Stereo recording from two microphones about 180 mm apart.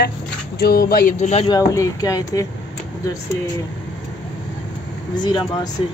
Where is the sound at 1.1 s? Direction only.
35° left (ahead or behind).